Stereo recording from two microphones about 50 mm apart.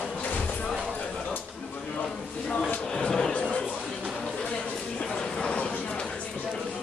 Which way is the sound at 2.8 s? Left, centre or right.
Centre.